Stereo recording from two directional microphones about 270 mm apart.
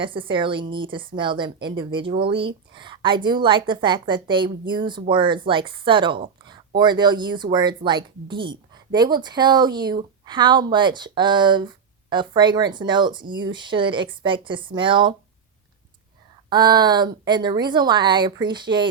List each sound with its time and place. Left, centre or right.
0.0 s a woman's voice: centre
16.5 s a woman's voice: centre